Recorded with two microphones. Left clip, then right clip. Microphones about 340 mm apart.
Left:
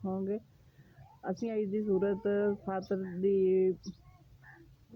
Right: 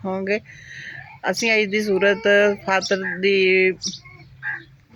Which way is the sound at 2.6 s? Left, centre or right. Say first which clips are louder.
Right 16 dB; left.